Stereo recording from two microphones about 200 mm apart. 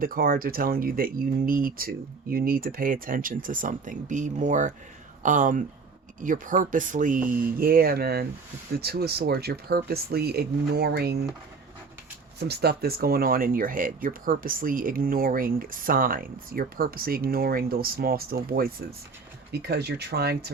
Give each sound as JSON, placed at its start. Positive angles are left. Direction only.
{"t": 0.0, "sound": "speech", "side_deg": -45}
{"t": 12.4, "sound": "speech", "side_deg": -55}